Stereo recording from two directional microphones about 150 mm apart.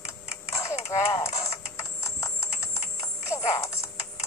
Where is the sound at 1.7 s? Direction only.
20° left (ahead or behind).